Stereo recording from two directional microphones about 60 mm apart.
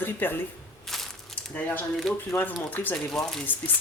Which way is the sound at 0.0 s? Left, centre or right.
Left.